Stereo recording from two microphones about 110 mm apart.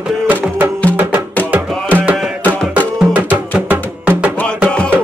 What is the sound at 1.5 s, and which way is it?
Music, 15° right (ahead or behind).